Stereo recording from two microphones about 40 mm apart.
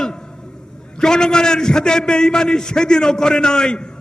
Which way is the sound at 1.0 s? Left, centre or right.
Centre.